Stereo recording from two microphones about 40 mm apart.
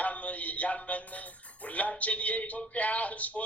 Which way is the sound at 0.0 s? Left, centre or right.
Left.